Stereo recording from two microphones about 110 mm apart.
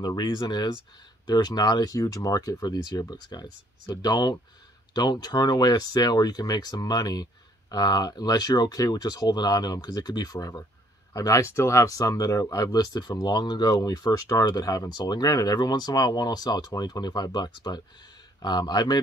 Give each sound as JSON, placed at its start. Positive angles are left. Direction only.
{"t": 0.0, "sound": "speech", "side_deg": 40}